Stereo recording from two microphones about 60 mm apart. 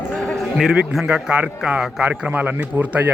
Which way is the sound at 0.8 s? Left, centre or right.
Centre.